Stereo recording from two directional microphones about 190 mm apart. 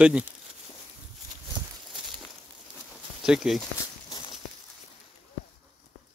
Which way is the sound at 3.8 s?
20° left (ahead or behind).